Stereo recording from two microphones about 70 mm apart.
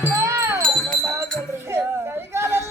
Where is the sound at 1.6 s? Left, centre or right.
Right.